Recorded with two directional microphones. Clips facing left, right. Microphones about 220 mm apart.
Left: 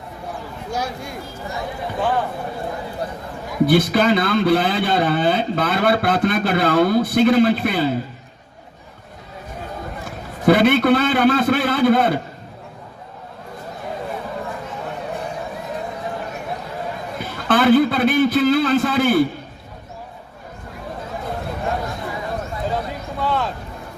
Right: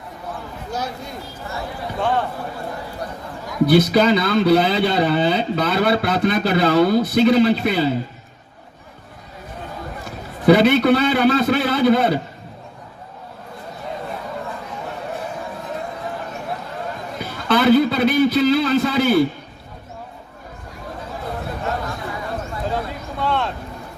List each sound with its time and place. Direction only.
3.7 s speech: 50° left (ahead or behind)
10.4 s speech: 50° left (ahead or behind)
17.5 s speech: 50° left (ahead or behind)
23.1 s speech: centre (ahead or behind)